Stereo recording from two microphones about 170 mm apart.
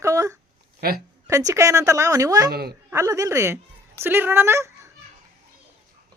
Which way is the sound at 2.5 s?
70° right (ahead or behind).